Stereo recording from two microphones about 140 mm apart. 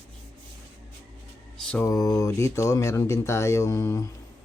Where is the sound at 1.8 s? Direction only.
25° left (ahead or behind).